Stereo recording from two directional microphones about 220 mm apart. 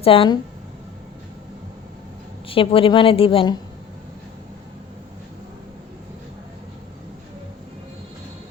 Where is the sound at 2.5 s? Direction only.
25° left (ahead or behind).